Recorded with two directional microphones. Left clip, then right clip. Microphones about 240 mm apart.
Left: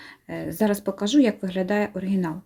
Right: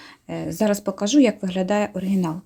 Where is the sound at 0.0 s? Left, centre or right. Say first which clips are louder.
Right 2 dB; centre.